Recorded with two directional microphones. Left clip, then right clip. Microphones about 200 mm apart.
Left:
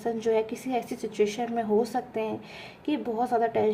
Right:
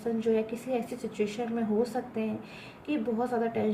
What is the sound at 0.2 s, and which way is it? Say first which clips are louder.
A woman's voice: left 2 dB; 50° left (ahead or behind).